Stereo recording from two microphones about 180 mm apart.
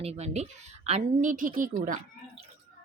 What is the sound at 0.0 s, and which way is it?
A woman's voice, 35° right (ahead or behind).